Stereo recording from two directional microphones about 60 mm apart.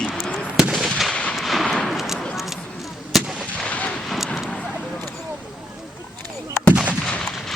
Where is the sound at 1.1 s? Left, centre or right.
Centre.